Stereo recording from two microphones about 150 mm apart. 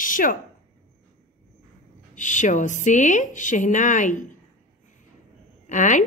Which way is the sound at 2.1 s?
55° left (ahead or behind).